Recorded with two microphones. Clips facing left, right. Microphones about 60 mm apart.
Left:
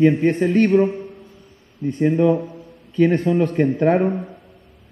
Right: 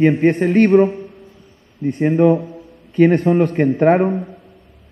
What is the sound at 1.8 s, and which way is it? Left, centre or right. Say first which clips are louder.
A man's voice: right 3 dB; right.